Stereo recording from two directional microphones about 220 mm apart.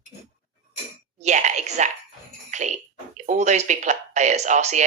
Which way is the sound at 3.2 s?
35° right (ahead or behind).